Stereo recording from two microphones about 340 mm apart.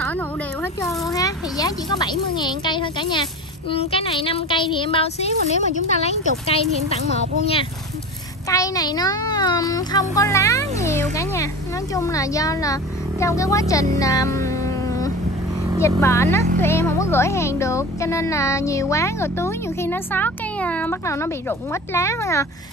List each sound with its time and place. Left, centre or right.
0.8 s a child's voice: centre
8.5 s speech: centre